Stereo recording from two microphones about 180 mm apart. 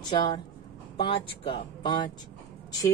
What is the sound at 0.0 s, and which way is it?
Speech, 25° left (ahead or behind).